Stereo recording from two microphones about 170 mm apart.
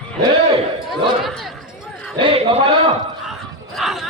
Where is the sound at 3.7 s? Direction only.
Centre (ahead or behind).